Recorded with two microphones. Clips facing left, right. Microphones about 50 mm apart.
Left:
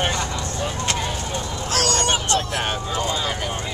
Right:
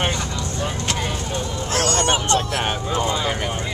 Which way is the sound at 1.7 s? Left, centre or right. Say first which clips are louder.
Right 1 dB; right.